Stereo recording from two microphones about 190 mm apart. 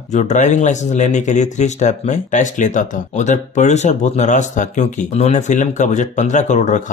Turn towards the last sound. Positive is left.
turn(degrees=40)  # may be behind; listen again after turning